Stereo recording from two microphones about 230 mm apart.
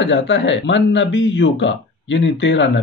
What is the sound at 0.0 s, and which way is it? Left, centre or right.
A man's voice, left.